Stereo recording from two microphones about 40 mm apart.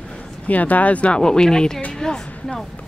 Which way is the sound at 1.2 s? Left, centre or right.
Centre.